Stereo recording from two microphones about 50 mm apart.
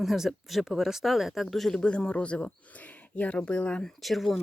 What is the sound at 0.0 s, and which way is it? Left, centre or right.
Speech, centre.